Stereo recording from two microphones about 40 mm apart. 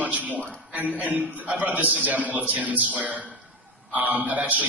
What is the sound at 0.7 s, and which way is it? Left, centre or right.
A man's voice, right.